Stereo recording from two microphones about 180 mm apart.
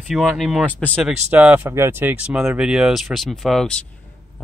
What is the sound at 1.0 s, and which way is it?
Speech, 5° right (ahead or behind).